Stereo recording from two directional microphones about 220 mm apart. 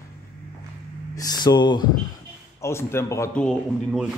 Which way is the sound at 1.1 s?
20° left (ahead or behind).